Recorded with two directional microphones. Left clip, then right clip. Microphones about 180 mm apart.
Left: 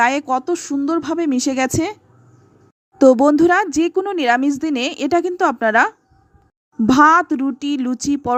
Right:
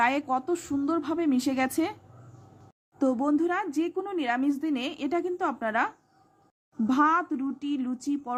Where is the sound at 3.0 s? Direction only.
45° left (ahead or behind).